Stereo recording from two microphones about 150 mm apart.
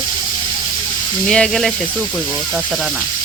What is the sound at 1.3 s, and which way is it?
Speech, 5° left (ahead or behind).